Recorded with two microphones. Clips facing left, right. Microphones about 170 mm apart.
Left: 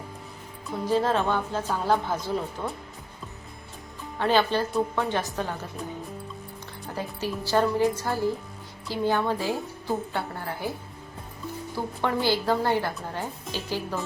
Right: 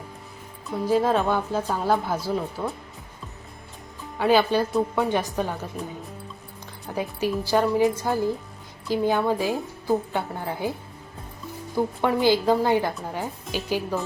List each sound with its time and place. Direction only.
0.7 s a woman's voice: 10° right (ahead or behind)
4.2 s a woman's voice: 10° right (ahead or behind)
6.9 s a woman's voice: 15° right (ahead or behind)
12.0 s a woman's voice: 15° right (ahead or behind)